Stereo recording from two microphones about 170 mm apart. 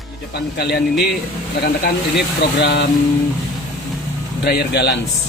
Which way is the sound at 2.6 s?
80° left.